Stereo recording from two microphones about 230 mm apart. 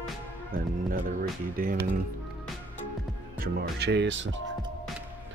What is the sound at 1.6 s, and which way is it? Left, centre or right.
Speech, right.